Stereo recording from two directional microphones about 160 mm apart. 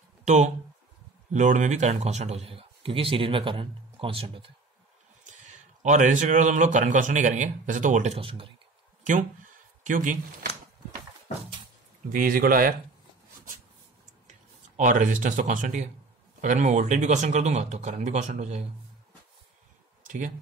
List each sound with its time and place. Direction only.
0.2 s a sound: 45° right (ahead or behind)
1.3 s a man's voice: 50° right (ahead or behind); by 4.5 s 35° right (ahead or behind)
5.2 s speech: 50° right (ahead or behind); by 8.5 s 35° right (ahead or behind)
9.8 s speech: 55° right (ahead or behind)
12.1 s speech: 60° right (ahead or behind)
14.8 s speech: 55° right (ahead or behind)
20.0 s a sound: 55° right (ahead or behind)